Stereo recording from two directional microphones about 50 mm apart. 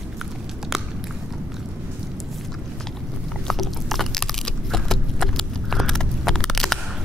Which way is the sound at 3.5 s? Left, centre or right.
Centre.